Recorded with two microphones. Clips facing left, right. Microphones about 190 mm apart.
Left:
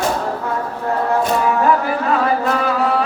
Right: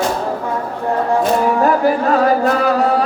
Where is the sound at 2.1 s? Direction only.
40° right (ahead or behind).